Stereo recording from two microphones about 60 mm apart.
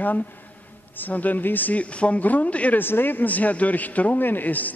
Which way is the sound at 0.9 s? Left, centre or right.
Left.